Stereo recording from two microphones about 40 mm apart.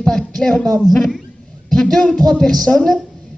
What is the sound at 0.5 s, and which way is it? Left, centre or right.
Speech, left.